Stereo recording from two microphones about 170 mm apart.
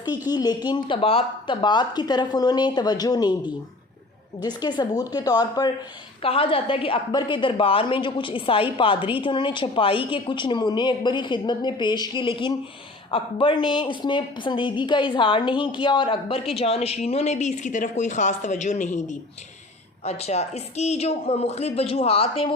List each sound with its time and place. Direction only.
0.3 s a woman's voice: 25° left (ahead or behind)
4.4 s a woman's voice: 25° left (ahead or behind)